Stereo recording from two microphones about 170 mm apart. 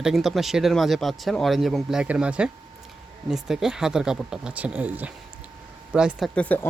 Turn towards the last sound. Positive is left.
turn(degrees=10)  # may be behind; listen again after turning